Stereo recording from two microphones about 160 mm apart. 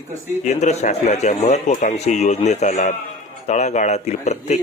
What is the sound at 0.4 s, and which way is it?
Speech, 45° left (ahead or behind).